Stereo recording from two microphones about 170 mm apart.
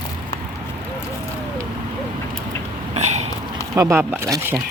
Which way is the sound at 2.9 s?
40° right (ahead or behind).